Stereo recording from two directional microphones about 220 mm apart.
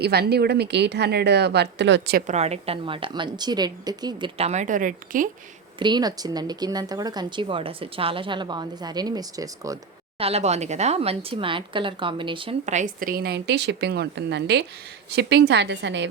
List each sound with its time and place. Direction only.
0.0 s speech: 45° right (ahead or behind)
2.2 s speech: 30° right (ahead or behind)
5.8 s speech: 20° right (ahead or behind)
10.2 s speech: 25° right (ahead or behind); by 16.0 s 55° right (ahead or behind)